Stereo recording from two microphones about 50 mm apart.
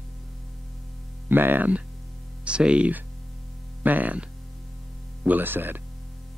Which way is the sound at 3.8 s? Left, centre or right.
Right.